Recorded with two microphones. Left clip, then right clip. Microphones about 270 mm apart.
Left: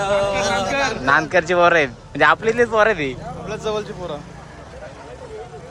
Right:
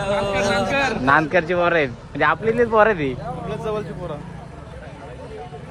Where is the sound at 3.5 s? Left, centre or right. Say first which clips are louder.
Left 3 dB; left.